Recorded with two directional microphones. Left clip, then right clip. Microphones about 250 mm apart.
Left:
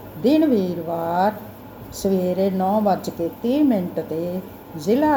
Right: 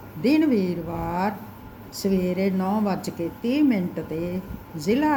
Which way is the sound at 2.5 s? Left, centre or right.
Centre.